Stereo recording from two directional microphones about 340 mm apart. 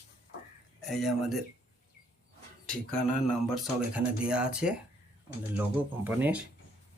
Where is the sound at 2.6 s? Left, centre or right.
Centre.